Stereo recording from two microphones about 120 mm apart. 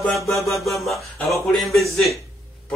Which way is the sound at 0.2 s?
25° left (ahead or behind).